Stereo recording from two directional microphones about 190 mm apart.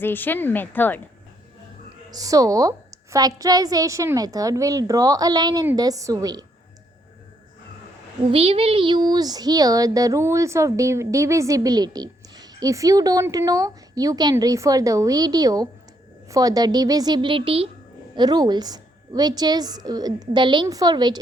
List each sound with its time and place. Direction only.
0.0 s a woman's voice: 10° left (ahead or behind)
2.0 s speech: 20° right (ahead or behind)
8.3 s speech: 30° right (ahead or behind)